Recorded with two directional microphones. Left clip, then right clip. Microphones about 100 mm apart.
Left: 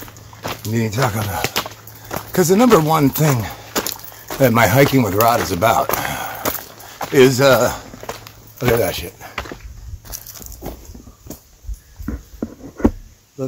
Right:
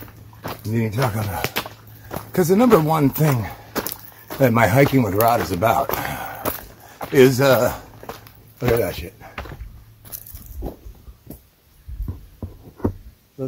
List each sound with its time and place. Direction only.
0.4 s speech: 5° left (ahead or behind)
1.4 s a sound: 5° right (ahead or behind)
4.4 s speech: 10° left (ahead or behind)
5.9 s a sound: 5° left (ahead or behind)
7.0 s speech: centre (ahead or behind)
8.7 s speech: 25° left (ahead or behind)
9.2 s walk: 30° left (ahead or behind)